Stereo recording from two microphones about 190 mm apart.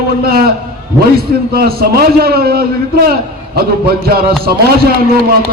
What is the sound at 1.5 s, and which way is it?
A man's voice, 55° right (ahead or behind).